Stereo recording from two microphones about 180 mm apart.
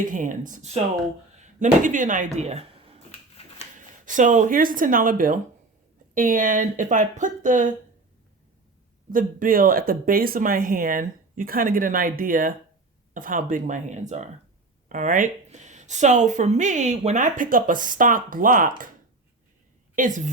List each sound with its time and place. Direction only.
0.0 s speech: 45° right (ahead or behind)
3.8 s speech: 45° right (ahead or behind)
9.1 s speech: 50° right (ahead or behind)
20.0 s speech: 45° right (ahead or behind)